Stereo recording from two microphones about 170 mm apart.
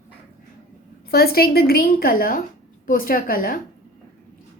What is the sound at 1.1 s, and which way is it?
A woman's voice, 65° left (ahead or behind).